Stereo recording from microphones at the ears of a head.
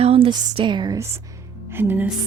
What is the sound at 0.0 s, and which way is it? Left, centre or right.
Speech, right.